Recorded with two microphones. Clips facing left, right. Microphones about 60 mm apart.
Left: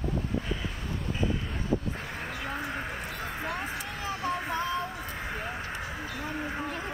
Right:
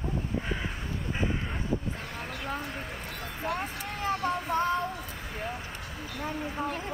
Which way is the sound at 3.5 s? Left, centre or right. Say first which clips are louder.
Right 1 dB; right.